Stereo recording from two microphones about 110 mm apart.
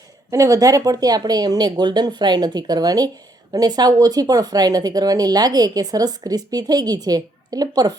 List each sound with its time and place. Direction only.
0.3 s speech: 30° right (ahead or behind)